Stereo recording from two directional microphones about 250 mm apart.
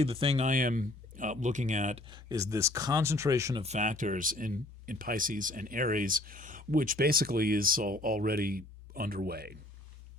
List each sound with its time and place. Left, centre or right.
0.0 s speech: right
2.0 s speech: centre
3.6 s speech: right